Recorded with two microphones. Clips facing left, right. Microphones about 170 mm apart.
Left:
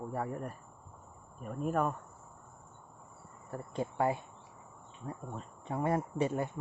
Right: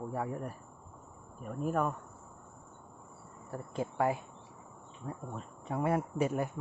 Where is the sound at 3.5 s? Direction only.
5° right (ahead or behind).